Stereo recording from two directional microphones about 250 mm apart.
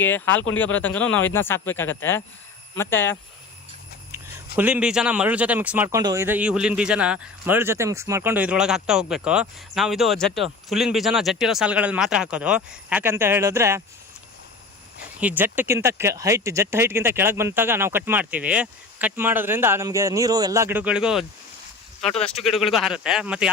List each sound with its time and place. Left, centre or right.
0.0 s speech: centre
4.5 s speech: centre
15.2 s speech: centre